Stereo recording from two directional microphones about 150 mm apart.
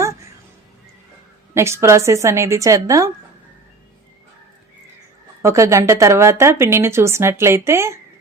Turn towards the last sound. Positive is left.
turn(degrees=-15)  # may be behind; listen again after turning